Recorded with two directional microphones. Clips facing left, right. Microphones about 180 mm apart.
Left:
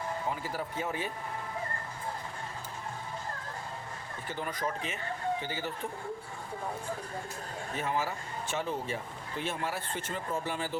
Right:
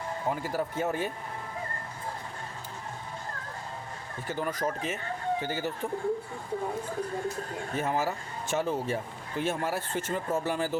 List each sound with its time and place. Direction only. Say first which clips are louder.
0.5 s speech: right 5 dB; 50° right (ahead or behind)
4.3 s speech: right 4 dB; 40° right (ahead or behind)
7.8 s speech: right 3 dB; 45° right (ahead or behind)